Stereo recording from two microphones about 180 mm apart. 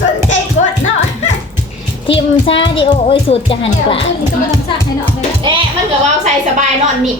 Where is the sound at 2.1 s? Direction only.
30° left (ahead or behind).